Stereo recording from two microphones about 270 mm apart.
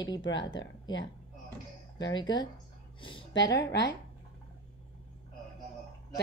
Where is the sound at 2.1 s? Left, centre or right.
Centre.